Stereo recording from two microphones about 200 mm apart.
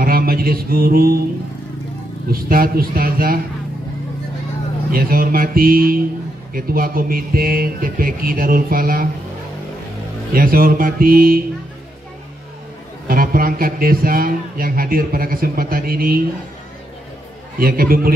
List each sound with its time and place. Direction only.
0.0 s mantra: 45° right (ahead or behind)
2.3 s a man's voice: 45° right (ahead or behind)
4.9 s a man's voice: 45° right (ahead or behind)
10.3 s a man's voice: 45° right (ahead or behind)
13.1 s a man's voice: 45° right (ahead or behind)
17.6 s a man's voice: 45° right (ahead or behind)